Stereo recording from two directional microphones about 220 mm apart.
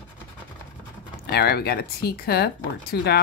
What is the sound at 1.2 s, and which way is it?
Speech, 45° left (ahead or behind).